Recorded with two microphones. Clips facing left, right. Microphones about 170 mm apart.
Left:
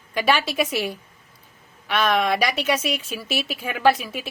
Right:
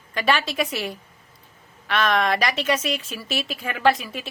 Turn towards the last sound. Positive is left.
turn(degrees=5)  # may be behind; listen again after turning